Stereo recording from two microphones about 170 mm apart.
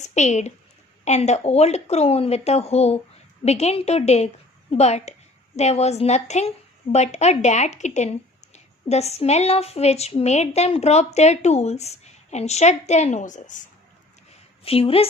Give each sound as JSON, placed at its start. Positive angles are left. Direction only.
{"t": 0.0, "sound": "a woman's voice", "side_deg": 45}
{"t": 14.6, "sound": "a woman's voice", "side_deg": 35}